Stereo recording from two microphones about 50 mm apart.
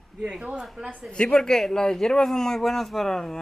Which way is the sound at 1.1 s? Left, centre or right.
Centre.